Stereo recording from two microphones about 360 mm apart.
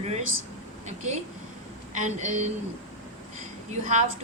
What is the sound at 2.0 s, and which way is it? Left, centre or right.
Speech, centre.